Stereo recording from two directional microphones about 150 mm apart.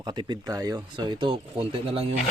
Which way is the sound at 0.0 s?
30° right (ahead or behind).